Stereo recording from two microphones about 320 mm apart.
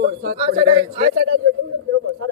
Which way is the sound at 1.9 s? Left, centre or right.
Right.